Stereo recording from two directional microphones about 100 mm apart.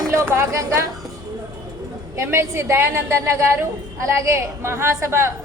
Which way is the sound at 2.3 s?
25° right (ahead or behind).